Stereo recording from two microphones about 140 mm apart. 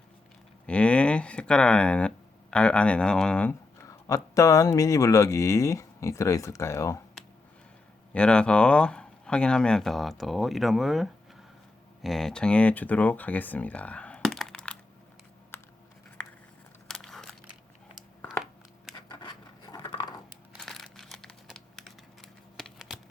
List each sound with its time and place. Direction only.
0.7 s speech: 10° left (ahead or behind)
3.8 s speech: 25° left (ahead or behind)
8.1 s speech: 5° left (ahead or behind)
15.5 s computer keyboard: 15° left (ahead or behind)
16.9 s crumpling: 5° left (ahead or behind)
19.6 s a sound: 30° left (ahead or behind)
20.6 s crumpling: centre (ahead or behind)